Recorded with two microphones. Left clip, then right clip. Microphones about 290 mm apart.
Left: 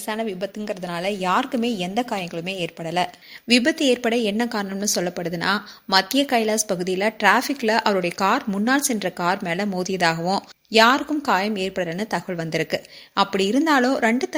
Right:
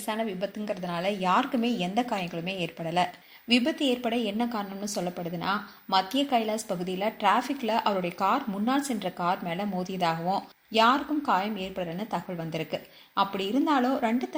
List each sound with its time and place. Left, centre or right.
0.1 s speech: left